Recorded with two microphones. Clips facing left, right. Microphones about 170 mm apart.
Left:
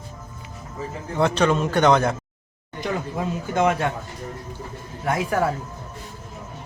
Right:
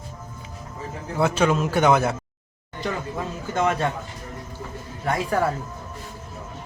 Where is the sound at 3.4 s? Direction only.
15° left (ahead or behind).